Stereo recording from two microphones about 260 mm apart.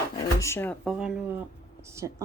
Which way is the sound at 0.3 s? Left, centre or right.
Centre.